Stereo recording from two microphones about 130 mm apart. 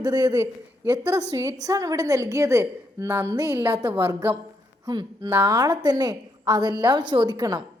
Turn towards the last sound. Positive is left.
turn(degrees=-30)  # may be behind; listen again after turning